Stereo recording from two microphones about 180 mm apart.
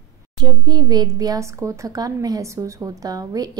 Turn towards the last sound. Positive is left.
turn(degrees=-20)  # may be behind; listen again after turning